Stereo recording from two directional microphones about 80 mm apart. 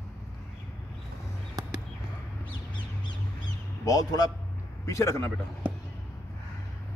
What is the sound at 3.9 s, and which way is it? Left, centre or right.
Speech, left.